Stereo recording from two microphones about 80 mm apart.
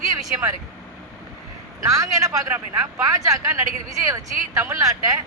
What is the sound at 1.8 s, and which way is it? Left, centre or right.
Speech, right.